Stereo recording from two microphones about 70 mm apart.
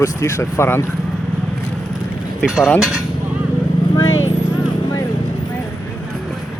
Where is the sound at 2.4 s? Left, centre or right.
Centre.